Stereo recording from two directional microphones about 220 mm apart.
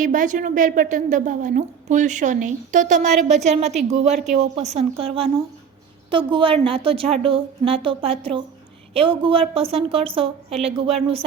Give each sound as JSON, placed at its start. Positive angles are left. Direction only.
{"t": 0.0, "sound": "a woman's voice", "side_deg": -35}